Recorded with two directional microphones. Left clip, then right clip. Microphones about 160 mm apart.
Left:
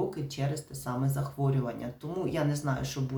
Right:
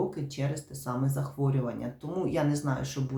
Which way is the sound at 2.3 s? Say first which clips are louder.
Right 3 dB; 5° left (ahead or behind).